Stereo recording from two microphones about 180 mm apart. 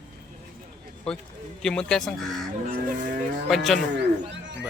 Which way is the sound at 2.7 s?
50° right (ahead or behind).